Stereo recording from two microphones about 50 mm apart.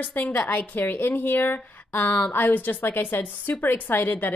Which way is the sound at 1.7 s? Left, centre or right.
Left.